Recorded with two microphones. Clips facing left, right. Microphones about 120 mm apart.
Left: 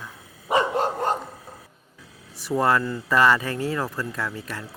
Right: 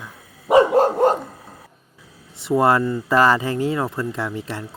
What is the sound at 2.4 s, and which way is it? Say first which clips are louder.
Speech: right 5 dB; 25° right (ahead or behind).